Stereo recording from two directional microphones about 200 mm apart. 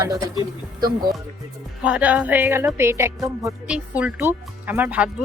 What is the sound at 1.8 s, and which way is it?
Speech, 5° right (ahead or behind).